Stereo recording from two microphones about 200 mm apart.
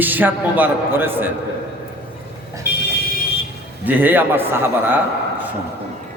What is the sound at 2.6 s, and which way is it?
Vehicle, 50° left (ahead or behind).